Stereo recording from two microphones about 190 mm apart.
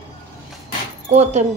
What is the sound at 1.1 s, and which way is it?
Speech, 35° right (ahead or behind).